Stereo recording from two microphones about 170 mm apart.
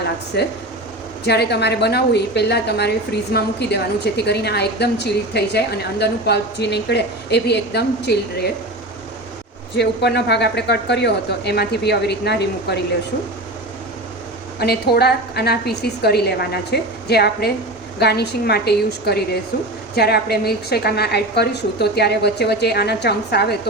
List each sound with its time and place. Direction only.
0.3 s a woman's voice: 75° left (ahead or behind)
9.7 s speech: 80° left
14.6 s a woman's voice: 70° left (ahead or behind)